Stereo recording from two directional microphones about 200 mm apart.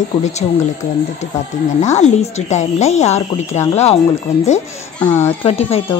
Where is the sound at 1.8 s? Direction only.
35° left (ahead or behind).